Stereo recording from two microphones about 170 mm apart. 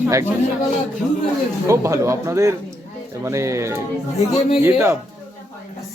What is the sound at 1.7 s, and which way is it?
Speech, 15° right (ahead or behind).